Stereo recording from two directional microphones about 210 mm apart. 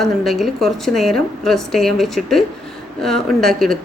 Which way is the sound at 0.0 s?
Centre (ahead or behind).